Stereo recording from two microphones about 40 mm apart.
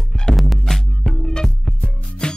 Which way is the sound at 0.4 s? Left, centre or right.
Centre.